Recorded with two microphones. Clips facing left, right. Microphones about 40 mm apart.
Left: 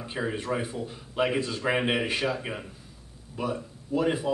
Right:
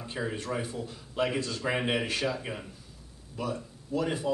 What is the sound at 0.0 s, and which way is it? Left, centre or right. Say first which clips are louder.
Speech: left 3 dB; centre.